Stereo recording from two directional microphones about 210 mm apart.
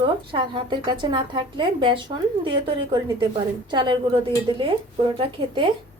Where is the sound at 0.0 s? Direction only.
25° right (ahead or behind).